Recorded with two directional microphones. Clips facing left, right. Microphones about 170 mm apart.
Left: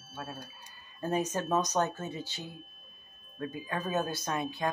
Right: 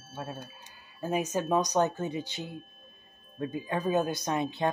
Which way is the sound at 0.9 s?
10° right (ahead or behind).